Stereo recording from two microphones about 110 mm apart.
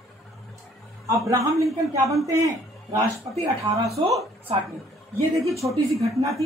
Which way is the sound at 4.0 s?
55° right (ahead or behind).